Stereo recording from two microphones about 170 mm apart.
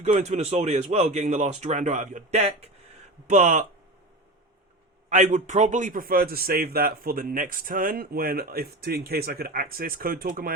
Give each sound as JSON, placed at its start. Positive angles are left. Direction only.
{"t": 0.0, "sound": "speech", "side_deg": -40}
{"t": 5.0, "sound": "a man's voice", "side_deg": -45}